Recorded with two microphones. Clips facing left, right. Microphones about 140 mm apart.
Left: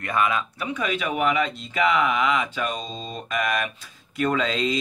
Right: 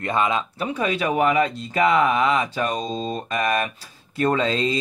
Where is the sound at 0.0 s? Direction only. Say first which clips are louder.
Right 2 dB; 25° right (ahead or behind).